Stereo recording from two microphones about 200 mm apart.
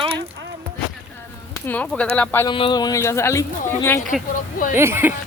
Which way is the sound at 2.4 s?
25° left (ahead or behind).